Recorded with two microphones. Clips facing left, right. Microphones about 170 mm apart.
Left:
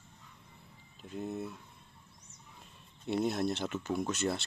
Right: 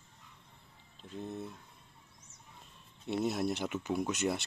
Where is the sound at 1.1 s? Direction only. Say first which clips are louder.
Left 3 dB; 5° left (ahead or behind).